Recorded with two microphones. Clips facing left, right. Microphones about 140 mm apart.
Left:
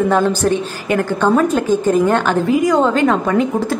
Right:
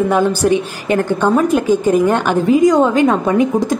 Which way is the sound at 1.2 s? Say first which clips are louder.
Even; 15° right (ahead or behind).